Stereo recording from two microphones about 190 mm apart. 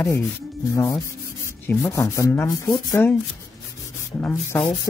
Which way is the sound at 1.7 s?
15° left (ahead or behind).